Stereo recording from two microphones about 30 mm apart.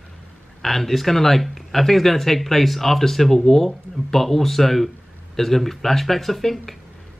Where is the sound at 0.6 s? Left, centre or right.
Centre.